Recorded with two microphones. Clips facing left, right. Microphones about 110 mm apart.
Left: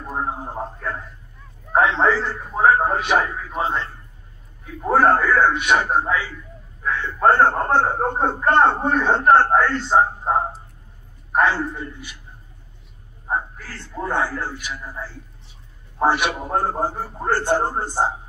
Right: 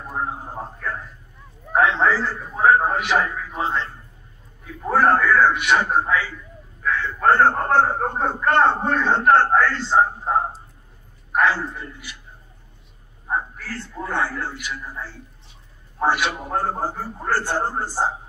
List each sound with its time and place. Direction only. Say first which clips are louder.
1.7 s a man's voice: left 1 dB; 25° left (ahead or behind)
4.8 s a man's voice: left 1 dB; 25° left (ahead or behind)
11.3 s a man's voice: left 1 dB; 25° left (ahead or behind)
13.6 s a man's voice: left 1 dB; 20° left (ahead or behind)
16.0 s a man's voice: left 2 dB; 20° left (ahead or behind)